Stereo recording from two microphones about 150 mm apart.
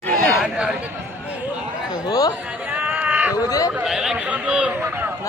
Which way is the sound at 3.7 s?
5° right (ahead or behind).